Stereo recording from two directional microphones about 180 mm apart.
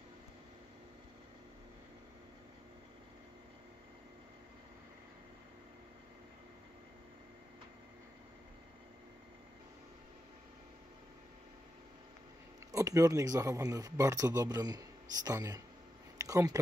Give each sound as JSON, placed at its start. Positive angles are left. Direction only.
{"t": 12.7, "sound": "speech", "side_deg": -20}